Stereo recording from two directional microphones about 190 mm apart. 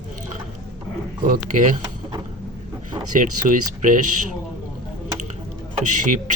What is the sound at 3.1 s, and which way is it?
Speech, 45° right (ahead or behind).